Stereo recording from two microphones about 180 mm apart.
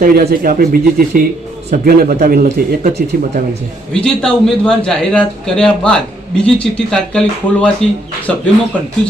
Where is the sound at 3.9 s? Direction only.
5° left (ahead or behind).